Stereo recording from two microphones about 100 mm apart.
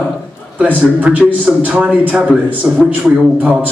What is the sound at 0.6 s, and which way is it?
A man's voice, 15° right (ahead or behind).